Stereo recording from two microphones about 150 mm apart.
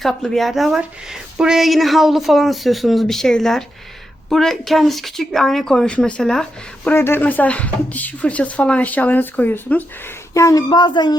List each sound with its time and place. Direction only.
0.0 s speech: centre (ahead or behind)
6.9 s speech: 15° left (ahead or behind)
10.3 s speech: 20° left (ahead or behind)